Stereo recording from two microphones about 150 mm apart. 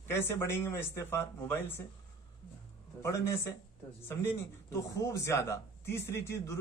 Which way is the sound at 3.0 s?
15° left (ahead or behind).